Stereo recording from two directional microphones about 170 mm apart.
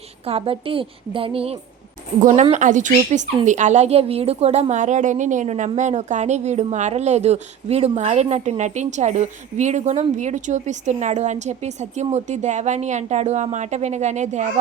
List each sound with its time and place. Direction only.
0.3 s a woman's voice: 35° right (ahead or behind)